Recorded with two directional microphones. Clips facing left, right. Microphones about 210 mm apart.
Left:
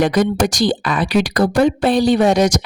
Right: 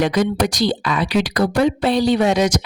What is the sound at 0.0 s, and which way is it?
Speech, 50° left (ahead or behind).